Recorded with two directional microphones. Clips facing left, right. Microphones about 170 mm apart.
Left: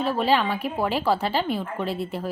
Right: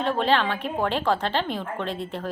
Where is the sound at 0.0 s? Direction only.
5° left (ahead or behind).